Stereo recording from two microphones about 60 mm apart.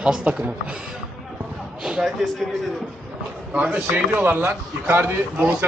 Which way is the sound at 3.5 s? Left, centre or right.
Right.